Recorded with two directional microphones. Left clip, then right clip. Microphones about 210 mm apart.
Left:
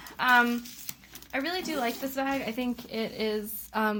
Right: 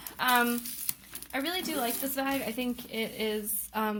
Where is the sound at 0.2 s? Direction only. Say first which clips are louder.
Left 3 dB; 20° left (ahead or behind).